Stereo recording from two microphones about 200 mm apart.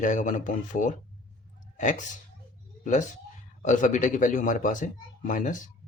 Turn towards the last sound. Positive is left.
turn(degrees=40)  # may be behind; listen again after turning